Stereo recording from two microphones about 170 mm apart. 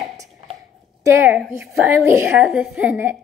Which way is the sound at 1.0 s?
15° right (ahead or behind).